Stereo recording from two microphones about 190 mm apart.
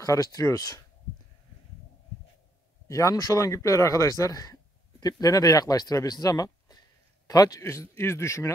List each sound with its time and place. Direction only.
0.0 s speech: 20° left (ahead or behind)
2.9 s speech: 15° left (ahead or behind)